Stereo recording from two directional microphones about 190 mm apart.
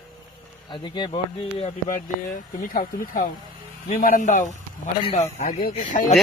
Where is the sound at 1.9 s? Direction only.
45° left (ahead or behind).